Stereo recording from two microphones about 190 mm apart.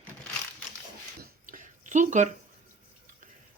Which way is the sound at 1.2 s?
45° right (ahead or behind).